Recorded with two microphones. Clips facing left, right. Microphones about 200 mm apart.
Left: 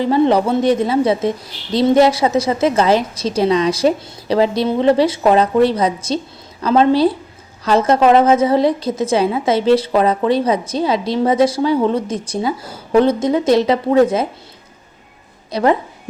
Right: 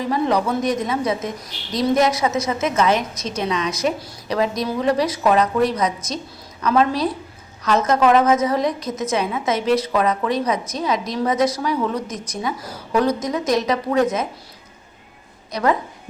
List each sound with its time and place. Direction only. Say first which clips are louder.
0.0 s a woman's voice: left 6 dB; 30° left (ahead or behind)
15.5 s a woman's voice: left 5 dB; 30° left (ahead or behind)